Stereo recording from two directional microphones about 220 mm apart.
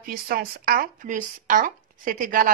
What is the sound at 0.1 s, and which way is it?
Speech, 45° right (ahead or behind).